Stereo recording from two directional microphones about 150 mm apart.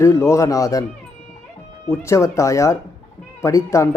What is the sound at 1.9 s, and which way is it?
Speech, 20° left (ahead or behind).